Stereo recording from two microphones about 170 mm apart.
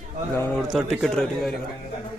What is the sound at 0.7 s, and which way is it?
Speech, centre (ahead or behind).